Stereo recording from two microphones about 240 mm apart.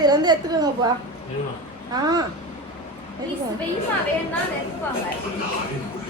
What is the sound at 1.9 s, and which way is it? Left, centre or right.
Speech, centre.